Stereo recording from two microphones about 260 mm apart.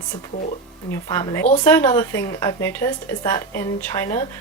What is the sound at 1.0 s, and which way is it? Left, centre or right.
Speech, centre.